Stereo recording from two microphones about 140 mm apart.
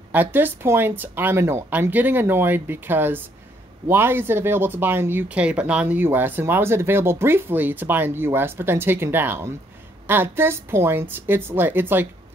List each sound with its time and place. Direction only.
0.1 s speech: 15° right (ahead or behind)